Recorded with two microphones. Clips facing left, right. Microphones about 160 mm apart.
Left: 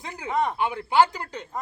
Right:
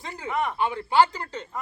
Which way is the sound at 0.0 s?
20° left (ahead or behind).